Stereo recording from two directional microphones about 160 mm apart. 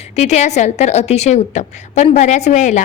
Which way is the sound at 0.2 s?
45° left (ahead or behind).